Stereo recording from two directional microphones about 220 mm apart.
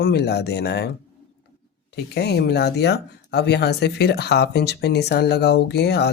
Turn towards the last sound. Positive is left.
turn(degrees=50)  # may be behind; listen again after turning